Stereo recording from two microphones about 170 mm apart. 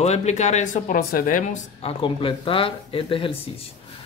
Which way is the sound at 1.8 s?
30° left (ahead or behind).